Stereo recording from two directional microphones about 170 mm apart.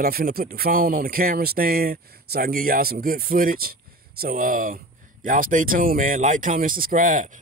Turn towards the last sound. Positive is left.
turn(degrees=-50)  # may be behind; listen again after turning